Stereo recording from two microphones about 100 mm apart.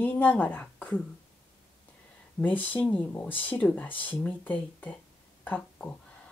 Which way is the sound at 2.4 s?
15° left (ahead or behind).